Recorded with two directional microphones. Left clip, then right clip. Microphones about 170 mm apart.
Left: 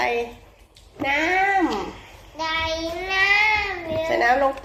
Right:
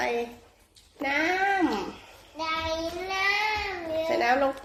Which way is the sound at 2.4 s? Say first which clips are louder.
Left 5 dB; 30° right (ahead or behind).